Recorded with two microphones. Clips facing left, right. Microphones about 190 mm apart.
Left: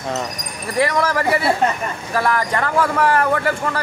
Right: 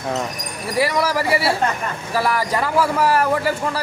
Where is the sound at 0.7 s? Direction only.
5° right (ahead or behind).